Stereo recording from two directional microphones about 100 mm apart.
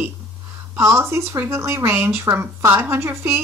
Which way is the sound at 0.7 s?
30° right (ahead or behind).